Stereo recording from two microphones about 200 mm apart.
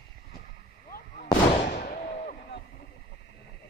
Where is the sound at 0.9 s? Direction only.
45° left (ahead or behind).